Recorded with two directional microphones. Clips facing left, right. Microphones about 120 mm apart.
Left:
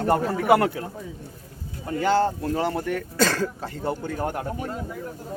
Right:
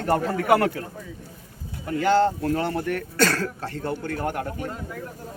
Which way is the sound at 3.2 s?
5° left (ahead or behind).